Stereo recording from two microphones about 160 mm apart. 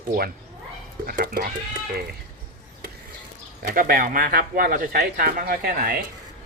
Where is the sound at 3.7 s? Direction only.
60° right (ahead or behind).